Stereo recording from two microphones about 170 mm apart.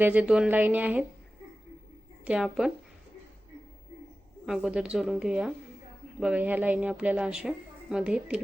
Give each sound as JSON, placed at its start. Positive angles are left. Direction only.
{"t": 0.0, "sound": "speech", "side_deg": -10}
{"t": 2.2, "sound": "a woman's voice", "side_deg": -5}
{"t": 4.4, "sound": "a woman's voice", "side_deg": -5}